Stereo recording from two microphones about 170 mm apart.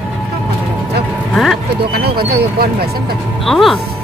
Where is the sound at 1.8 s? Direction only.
70° right (ahead or behind).